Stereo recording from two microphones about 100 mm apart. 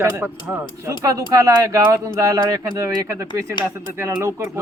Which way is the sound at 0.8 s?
35° right (ahead or behind).